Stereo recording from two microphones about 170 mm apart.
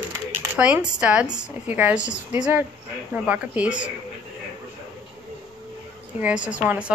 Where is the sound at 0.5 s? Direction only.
5° right (ahead or behind).